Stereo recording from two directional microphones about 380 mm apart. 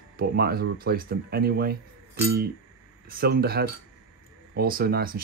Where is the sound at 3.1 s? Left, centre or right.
Right.